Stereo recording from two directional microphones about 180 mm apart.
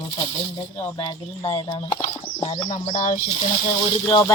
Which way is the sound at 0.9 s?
30° left (ahead or behind).